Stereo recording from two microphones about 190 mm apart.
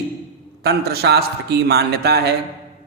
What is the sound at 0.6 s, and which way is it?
A man's voice, 55° right (ahead or behind).